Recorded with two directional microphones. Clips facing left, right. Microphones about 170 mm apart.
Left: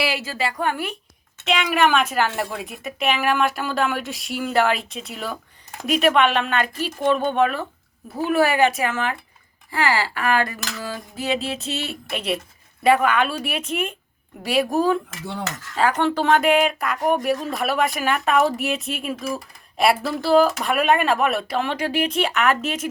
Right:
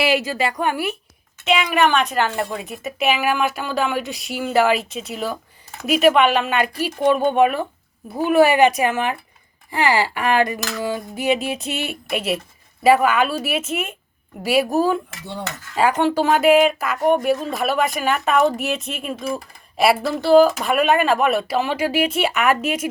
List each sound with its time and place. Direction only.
0.0 s speech: 20° right (ahead or behind)
1.5 s speech: centre (ahead or behind)
12.8 s speech: 5° right (ahead or behind)